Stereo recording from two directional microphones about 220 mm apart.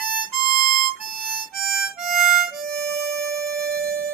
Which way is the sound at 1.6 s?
Centre (ahead or behind).